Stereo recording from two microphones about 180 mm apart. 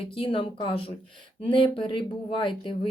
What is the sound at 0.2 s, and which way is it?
Speech, 30° left (ahead or behind).